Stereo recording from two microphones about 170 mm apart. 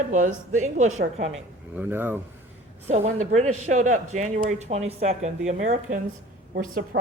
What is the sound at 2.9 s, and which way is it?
Speech, 45° right (ahead or behind).